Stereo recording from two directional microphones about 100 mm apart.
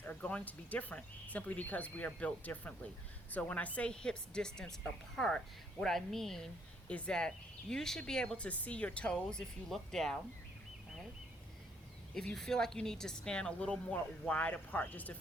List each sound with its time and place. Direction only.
0.0 s speech: 15° left (ahead or behind)
12.1 s speech: 5° left (ahead or behind)